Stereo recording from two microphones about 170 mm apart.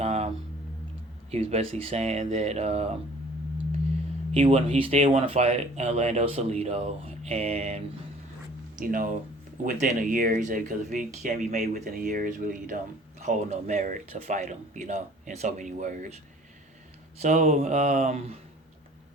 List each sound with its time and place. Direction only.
0.0 s a sound: 40° right (ahead or behind)
1.3 s speech: 40° right (ahead or behind)
4.3 s speech: 35° right (ahead or behind)
8.8 s speech: 55° right (ahead or behind)